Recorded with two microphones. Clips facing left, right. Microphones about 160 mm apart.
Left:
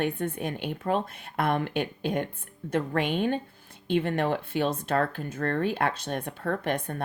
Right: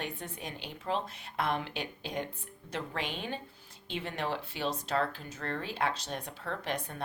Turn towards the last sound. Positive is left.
turn(degrees=55)  # may be behind; listen again after turning